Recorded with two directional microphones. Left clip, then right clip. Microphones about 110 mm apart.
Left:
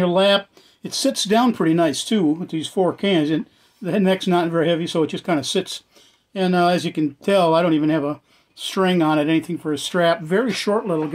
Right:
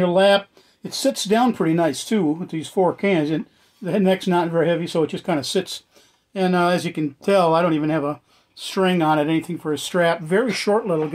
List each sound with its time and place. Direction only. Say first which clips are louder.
0.0 s speech: right 1 dB; 10° left (ahead or behind)
8.5 s speech: left 1 dB; 15° left (ahead or behind)